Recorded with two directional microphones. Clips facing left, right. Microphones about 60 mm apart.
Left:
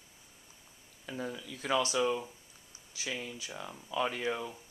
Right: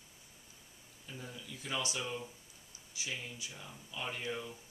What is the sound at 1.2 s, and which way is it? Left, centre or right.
Speech, left.